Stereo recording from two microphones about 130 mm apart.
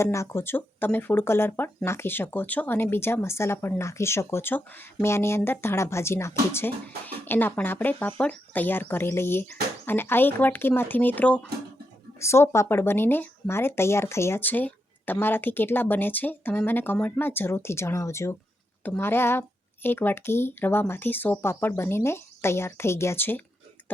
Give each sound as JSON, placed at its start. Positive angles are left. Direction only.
{"t": 0.0, "sound": "speech", "side_deg": 20}